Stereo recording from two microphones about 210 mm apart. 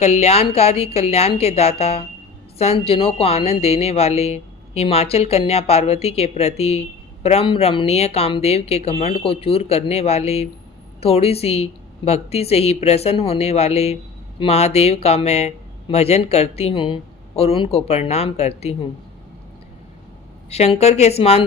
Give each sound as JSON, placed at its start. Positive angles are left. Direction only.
{"t": 0.0, "sound": "speech", "side_deg": 30}
{"t": 20.5, "sound": "speech", "side_deg": 30}